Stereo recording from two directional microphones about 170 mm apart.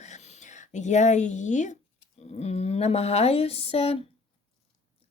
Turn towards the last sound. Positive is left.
turn(degrees=35)  # may be behind; listen again after turning